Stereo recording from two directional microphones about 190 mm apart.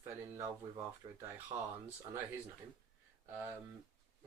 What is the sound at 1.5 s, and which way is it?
Speech, 30° right (ahead or behind).